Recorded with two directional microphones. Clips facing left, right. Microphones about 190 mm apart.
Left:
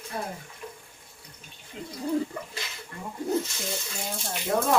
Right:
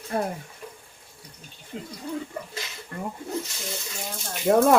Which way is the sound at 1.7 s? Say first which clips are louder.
Right 3 dB; 50° right (ahead or behind).